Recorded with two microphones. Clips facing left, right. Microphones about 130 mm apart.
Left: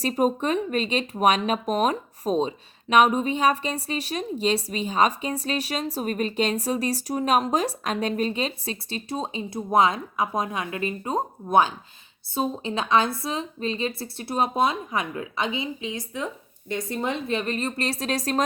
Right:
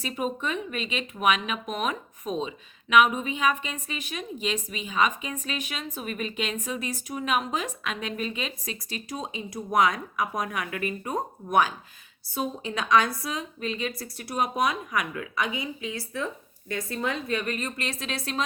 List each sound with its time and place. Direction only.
0.0 s a woman's voice: 40° left (ahead or behind)